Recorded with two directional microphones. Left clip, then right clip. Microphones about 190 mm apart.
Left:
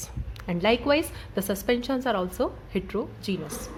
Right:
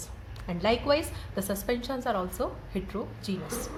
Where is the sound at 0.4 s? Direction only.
40° left (ahead or behind).